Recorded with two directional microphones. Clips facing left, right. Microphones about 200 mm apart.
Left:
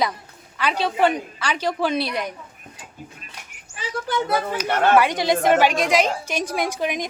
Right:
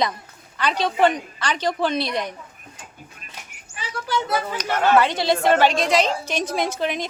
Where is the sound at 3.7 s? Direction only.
40° left (ahead or behind).